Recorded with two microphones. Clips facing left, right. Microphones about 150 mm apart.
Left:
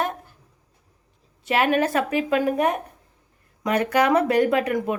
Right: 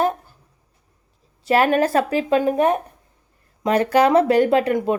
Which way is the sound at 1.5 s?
35° right (ahead or behind).